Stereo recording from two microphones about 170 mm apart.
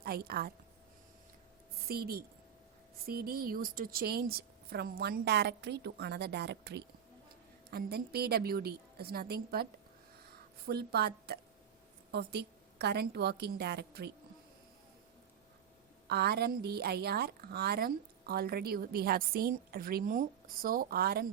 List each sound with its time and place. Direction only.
0.0 s a woman's voice: 65° right (ahead or behind)
1.9 s a woman's voice: 65° right (ahead or behind)
10.7 s speech: 70° right (ahead or behind)
16.0 s a woman's voice: 70° right (ahead or behind)